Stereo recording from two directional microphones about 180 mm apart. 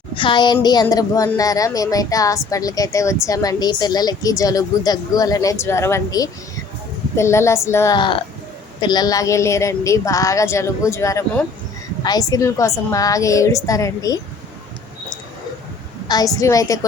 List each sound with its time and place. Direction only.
0.2 s a woman's voice: 25° left (ahead or behind)
7.9 s a woman's voice: 25° left (ahead or behind)
16.0 s a woman's voice: 20° left (ahead or behind)